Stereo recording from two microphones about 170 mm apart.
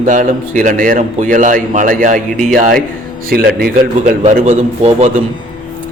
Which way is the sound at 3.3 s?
70° right (ahead or behind).